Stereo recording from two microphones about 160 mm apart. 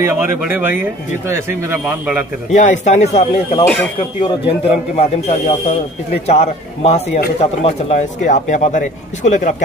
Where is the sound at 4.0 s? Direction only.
30° left (ahead or behind).